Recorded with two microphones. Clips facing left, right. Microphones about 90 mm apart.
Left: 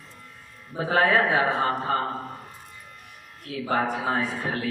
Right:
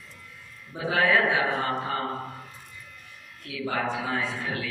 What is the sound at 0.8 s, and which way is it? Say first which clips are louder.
A man's voice: left 2 dB; 40° left (ahead or behind).